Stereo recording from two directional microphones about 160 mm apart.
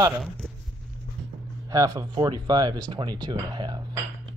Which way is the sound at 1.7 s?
20° right (ahead or behind).